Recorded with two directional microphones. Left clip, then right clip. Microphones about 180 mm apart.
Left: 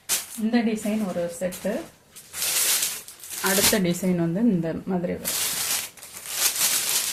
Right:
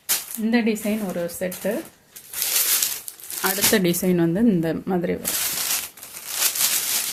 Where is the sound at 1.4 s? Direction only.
55° right (ahead or behind).